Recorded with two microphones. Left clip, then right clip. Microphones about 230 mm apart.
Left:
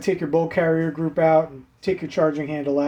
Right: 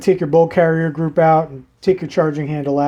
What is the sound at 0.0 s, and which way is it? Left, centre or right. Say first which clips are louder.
Speech: right 8 dB; right.